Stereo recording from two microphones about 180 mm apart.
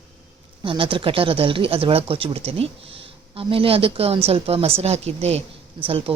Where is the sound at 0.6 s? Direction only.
30° right (ahead or behind).